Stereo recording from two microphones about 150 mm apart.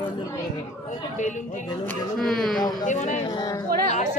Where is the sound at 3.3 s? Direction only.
25° left (ahead or behind).